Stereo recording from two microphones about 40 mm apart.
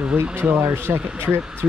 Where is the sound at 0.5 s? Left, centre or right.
Right.